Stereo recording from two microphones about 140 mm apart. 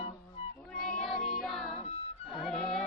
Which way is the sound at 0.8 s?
5° left (ahead or behind).